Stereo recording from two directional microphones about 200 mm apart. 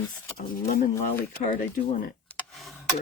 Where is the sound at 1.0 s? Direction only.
30° left (ahead or behind).